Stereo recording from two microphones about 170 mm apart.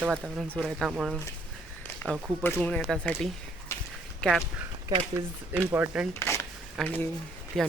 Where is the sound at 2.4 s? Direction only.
10° left (ahead or behind).